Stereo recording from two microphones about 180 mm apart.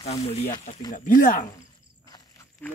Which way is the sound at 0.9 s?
45° left (ahead or behind).